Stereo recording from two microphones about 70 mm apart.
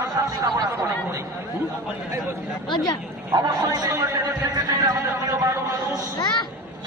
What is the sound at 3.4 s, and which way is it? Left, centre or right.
A man's voice, right.